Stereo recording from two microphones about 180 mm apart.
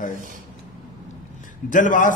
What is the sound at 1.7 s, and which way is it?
Speech, 45° left (ahead or behind).